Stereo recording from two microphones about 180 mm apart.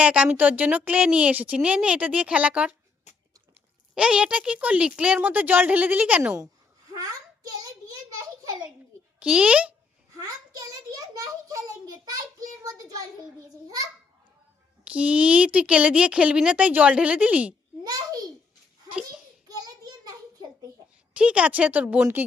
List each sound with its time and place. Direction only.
0.0 s a woman's voice: 5° right (ahead or behind)
3.9 s a woman's voice: 5° right (ahead or behind)
9.1 s a child's voice: 5° right (ahead or behind)
10.2 s a child's voice: 20° right (ahead or behind)
14.8 s a woman's voice: 5° right (ahead or behind)
17.8 s a child's voice: 20° right (ahead or behind)
18.9 s a sound: 5° right (ahead or behind)
19.5 s a sound: 20° right (ahead or behind)
21.1 s a woman's voice: 5° right (ahead or behind)